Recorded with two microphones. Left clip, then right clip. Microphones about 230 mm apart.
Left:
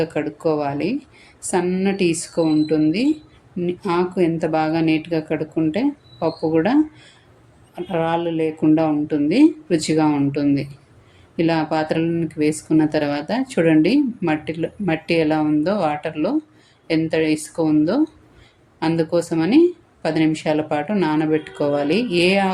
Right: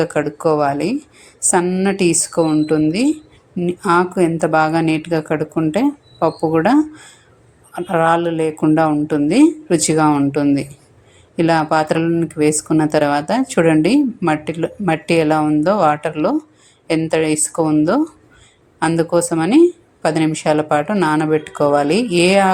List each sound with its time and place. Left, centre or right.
0.0 s a woman's voice: centre